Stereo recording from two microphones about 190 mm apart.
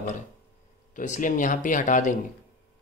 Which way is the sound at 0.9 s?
40° left (ahead or behind).